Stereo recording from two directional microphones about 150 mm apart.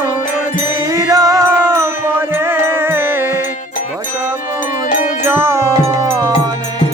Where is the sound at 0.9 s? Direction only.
20° right (ahead or behind).